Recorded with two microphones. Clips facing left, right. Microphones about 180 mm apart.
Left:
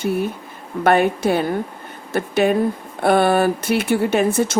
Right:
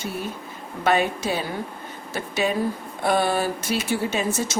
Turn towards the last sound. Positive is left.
turn(degrees=60)  # may be behind; listen again after turning